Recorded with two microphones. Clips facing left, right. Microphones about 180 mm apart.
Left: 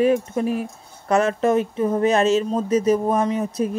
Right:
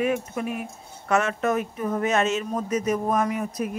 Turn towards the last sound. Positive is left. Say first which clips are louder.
# left 5 dB
turn(degrees=30)  # may be behind; listen again after turning